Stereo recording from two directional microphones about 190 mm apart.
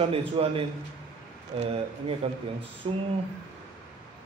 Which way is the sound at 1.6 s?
35° right (ahead or behind).